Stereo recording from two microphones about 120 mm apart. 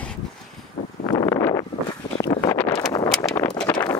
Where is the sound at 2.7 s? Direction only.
35° left (ahead or behind).